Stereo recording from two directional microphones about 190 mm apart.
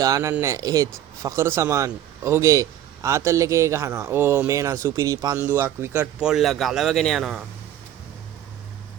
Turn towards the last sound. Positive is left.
turn(degrees=0)  # may be behind; listen again after turning